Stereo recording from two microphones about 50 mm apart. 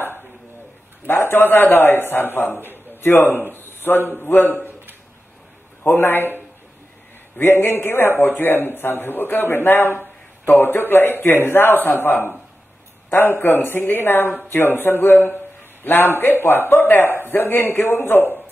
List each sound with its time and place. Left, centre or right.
1.0 s a man's voice: left
2.9 s a sound: left
3.5 s a man's voice: left
5.9 s a man's voice: left